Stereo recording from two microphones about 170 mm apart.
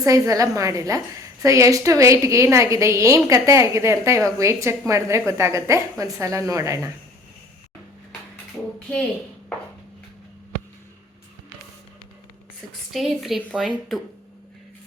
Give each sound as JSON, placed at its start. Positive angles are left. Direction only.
{"t": 0.0, "sound": "a woman's voice", "side_deg": -20}
{"t": 12.9, "sound": "a woman's voice", "side_deg": 0}